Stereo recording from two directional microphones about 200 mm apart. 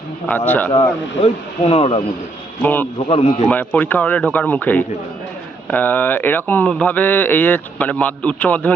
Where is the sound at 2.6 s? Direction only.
10° left (ahead or behind).